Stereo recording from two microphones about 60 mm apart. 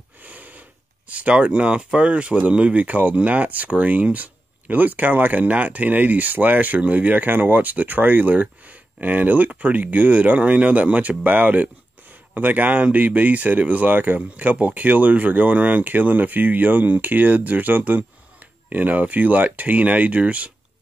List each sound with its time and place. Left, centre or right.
0.2 s speech: right